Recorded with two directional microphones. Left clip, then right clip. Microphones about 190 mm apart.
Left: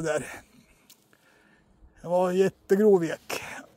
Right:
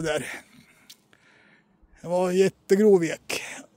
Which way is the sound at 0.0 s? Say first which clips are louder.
Right 1 dB; 25° right (ahead or behind).